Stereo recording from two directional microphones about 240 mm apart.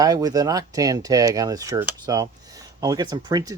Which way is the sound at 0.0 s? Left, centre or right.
Centre.